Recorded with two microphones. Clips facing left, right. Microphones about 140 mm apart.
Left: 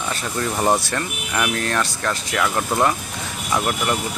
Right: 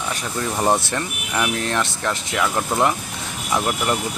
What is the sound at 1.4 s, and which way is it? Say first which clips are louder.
Speech: even; 15° right (ahead or behind).